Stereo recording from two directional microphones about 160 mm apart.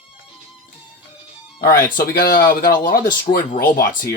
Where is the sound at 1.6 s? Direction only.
60° left (ahead or behind).